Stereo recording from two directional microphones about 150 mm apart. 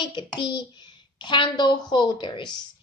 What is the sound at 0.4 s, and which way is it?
Speech, 30° left (ahead or behind).